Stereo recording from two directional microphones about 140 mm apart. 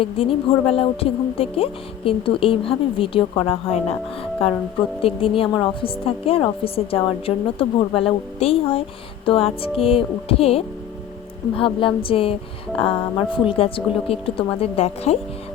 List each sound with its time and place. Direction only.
0.0 s speech: 40° left (ahead or behind)
8.4 s music: 45° left (ahead or behind)
11.5 s speech: 40° left (ahead or behind)